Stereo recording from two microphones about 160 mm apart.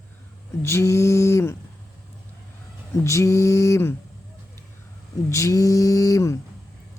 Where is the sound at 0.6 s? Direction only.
15° left (ahead or behind).